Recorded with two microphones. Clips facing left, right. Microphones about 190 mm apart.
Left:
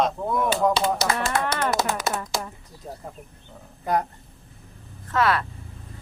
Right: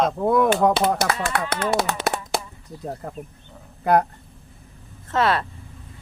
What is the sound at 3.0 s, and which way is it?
Speech, 65° right (ahead or behind).